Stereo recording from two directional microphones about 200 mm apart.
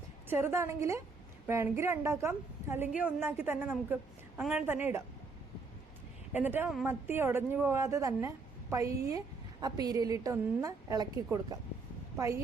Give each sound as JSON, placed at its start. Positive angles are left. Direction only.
{"t": 0.3, "sound": "a woman's voice", "side_deg": -10}
{"t": 6.3, "sound": "a woman's voice", "side_deg": -10}
{"t": 12.1, "sound": "speech", "side_deg": -15}